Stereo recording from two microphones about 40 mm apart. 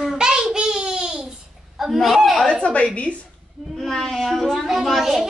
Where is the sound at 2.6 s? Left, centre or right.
Left.